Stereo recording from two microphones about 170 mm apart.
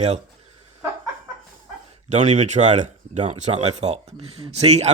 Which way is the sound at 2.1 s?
45° right (ahead or behind).